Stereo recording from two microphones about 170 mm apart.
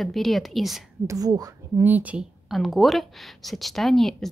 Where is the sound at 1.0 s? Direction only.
20° right (ahead or behind).